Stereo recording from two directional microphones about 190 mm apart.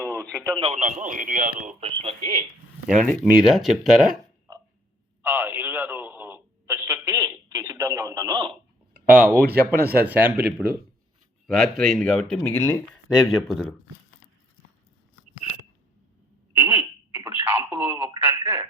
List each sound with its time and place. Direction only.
0.0 s radio: centre (ahead or behind)
0.5 s speech: 30° right (ahead or behind)
2.0 s speech: 30° right (ahead or behind)
2.8 s speech: 5° left (ahead or behind)
4.5 s a sound: 20° right (ahead or behind)
5.2 s radio: 10° right (ahead or behind)
8.9 s a sound: 45° right (ahead or behind)
9.8 s speech: 55° right (ahead or behind)
10.1 s speech: 10° right (ahead or behind)
16.6 s telephone: 10° right (ahead or behind)